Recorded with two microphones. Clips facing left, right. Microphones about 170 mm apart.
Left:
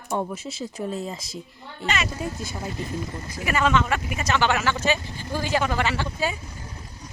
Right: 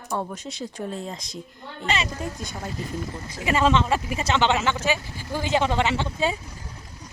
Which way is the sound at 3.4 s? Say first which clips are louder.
Right 1 dB; 25° right (ahead or behind).